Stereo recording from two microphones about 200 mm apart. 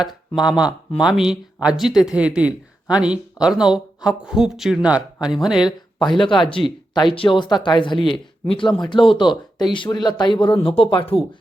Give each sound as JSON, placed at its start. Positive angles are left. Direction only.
{"t": 0.0, "sound": "speech", "side_deg": -5}
{"t": 6.1, "sound": "speech", "side_deg": 25}